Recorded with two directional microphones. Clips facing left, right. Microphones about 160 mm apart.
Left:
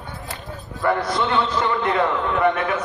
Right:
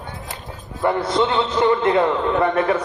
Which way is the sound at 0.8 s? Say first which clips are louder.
Right 2 dB; 25° right (ahead or behind).